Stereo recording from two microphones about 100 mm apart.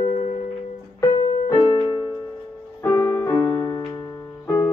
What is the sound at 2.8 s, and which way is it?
Music, 30° left (ahead or behind).